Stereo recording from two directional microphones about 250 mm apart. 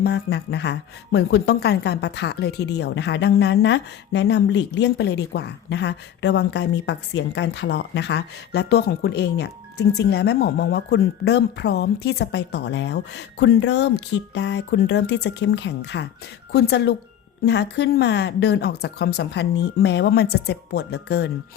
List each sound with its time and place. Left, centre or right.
0.0 s a woman's voice: left